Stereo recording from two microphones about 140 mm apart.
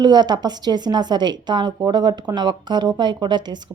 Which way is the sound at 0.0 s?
30° right (ahead or behind).